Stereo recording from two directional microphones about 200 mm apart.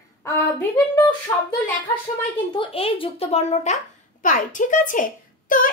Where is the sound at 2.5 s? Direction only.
25° left (ahead or behind).